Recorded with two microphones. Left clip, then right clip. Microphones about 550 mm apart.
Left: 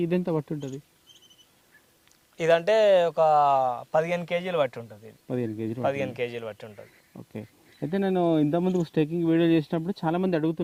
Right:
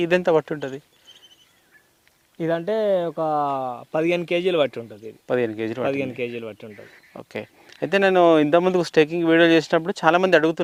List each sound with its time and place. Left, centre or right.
0.2 s speech: centre
2.4 s speech: left
5.3 s speech: centre
5.8 s speech: left
7.1 s speech: centre